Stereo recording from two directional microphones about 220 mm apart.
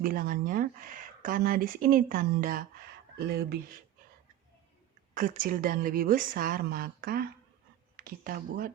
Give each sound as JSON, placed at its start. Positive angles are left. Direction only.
{"t": 0.0, "sound": "speech", "side_deg": -40}
{"t": 5.1, "sound": "speech", "side_deg": -40}